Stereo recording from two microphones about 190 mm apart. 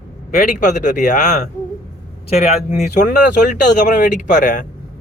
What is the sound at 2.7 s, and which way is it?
Speech, 40° left (ahead or behind).